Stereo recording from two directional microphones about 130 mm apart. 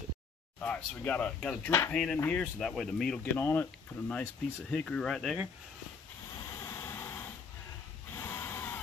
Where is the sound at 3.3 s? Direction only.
15° left (ahead or behind); by 5.5 s 5° right (ahead or behind).